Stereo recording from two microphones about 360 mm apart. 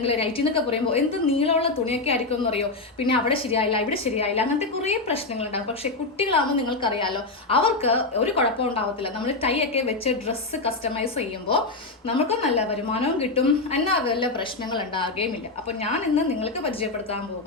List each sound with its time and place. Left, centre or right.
0.0 s a woman's voice: centre